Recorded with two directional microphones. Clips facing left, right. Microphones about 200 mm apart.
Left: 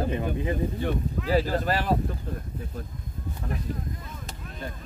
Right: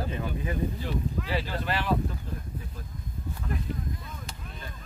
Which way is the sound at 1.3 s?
40° left (ahead or behind).